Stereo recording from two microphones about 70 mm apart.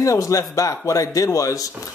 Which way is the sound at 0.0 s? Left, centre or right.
Left.